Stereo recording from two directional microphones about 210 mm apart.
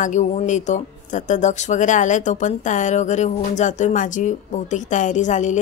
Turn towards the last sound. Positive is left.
turn(degrees=35)  # may be behind; listen again after turning